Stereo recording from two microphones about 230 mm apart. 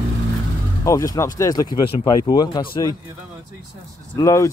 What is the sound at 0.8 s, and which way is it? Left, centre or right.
Speech, centre.